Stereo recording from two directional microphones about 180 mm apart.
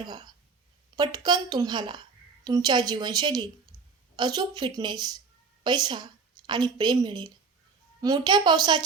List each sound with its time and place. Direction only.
0.0 s a woman's voice: 25° right (ahead or behind)
3.7 s a sound: 15° left (ahead or behind)
4.2 s a woman's voice: 20° right (ahead or behind)